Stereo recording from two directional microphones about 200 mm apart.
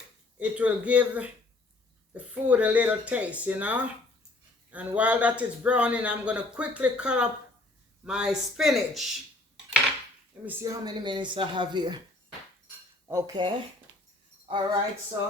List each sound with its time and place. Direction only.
0.3 s speech: 5° right (ahead or behind)
10.4 s speech: 10° right (ahead or behind)
13.1 s speech: 15° right (ahead or behind)